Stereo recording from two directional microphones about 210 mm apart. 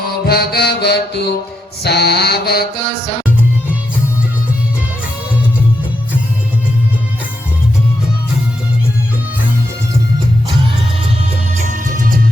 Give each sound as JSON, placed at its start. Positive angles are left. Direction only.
{"t": 0.0, "sound": "music", "side_deg": 45}
{"t": 1.8, "sound": "mantra", "side_deg": 50}
{"t": 11.5, "sound": "music", "side_deg": -40}